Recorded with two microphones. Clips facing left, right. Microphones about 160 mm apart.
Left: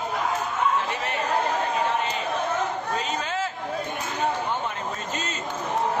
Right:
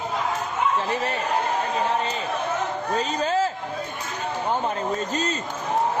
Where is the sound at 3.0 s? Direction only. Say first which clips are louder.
Right 5 dB; 35° right (ahead or behind).